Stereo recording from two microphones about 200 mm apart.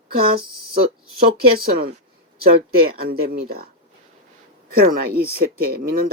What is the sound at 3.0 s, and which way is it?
Speech, 50° right (ahead or behind).